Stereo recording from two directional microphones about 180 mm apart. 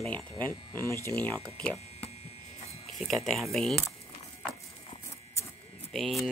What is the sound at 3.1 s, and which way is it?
Speech, centre (ahead or behind).